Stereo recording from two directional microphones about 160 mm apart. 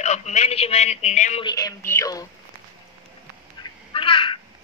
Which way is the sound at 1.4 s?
25° left (ahead or behind).